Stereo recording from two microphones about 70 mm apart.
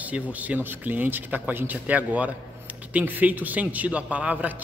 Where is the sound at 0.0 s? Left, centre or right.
Right.